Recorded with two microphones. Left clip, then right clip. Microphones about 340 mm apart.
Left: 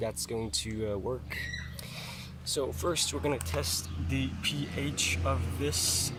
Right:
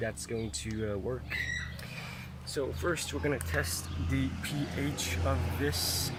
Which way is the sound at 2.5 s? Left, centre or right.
Centre.